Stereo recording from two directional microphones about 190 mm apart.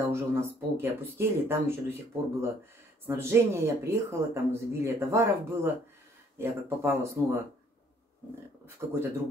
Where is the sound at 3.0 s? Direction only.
15° right (ahead or behind).